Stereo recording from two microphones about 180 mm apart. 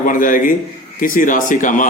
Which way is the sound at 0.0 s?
50° left (ahead or behind).